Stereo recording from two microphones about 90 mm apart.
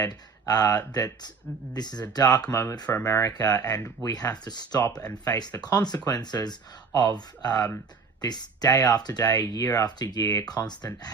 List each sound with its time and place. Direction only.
0.0 s speech: 45° left (ahead or behind)
3.8 s speech: 30° left (ahead or behind)
4.1 s speech: 45° left (ahead or behind)